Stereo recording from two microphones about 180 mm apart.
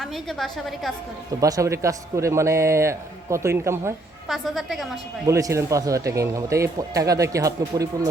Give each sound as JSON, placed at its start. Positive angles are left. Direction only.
{"t": 0.0, "sound": "a woman's voice", "side_deg": 0}
{"t": 1.4, "sound": "speech", "side_deg": -20}
{"t": 4.3, "sound": "a woman's voice", "side_deg": 0}
{"t": 5.2, "sound": "speech", "side_deg": -15}